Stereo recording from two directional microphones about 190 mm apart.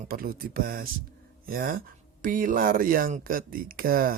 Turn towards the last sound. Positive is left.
turn(degrees=-50)  # may be behind; listen again after turning